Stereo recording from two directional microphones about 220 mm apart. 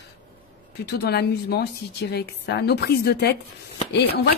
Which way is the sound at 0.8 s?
45° left (ahead or behind).